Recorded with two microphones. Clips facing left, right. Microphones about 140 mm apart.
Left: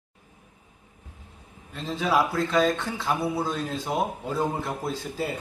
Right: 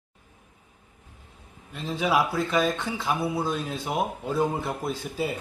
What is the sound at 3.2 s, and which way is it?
Speech, centre (ahead or behind).